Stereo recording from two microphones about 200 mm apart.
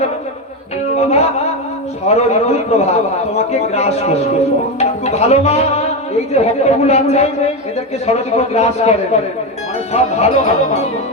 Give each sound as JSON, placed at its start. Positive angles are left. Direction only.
{"t": 0.9, "sound": "music", "side_deg": 30}
{"t": 2.0, "sound": "a man's voice", "side_deg": 35}